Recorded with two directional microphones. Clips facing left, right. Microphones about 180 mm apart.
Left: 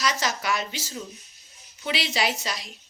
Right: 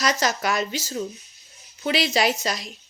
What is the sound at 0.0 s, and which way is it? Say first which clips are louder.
A woman's voice: right 4 dB; 45° right (ahead or behind).